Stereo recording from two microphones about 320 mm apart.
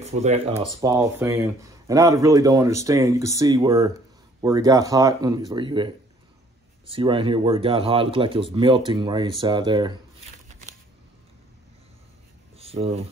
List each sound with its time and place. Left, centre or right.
0.0 s speech: right
0.7 s speech: centre
6.9 s speech: centre
12.5 s a sound: centre